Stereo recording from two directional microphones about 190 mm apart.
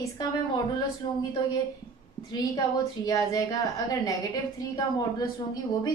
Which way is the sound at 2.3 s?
20° left (ahead or behind).